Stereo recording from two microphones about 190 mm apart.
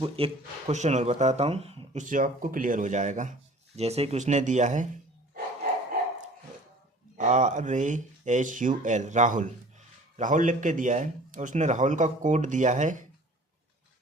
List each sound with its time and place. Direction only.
0.2 s speech: 30° right (ahead or behind)
7.2 s speech: 40° right (ahead or behind)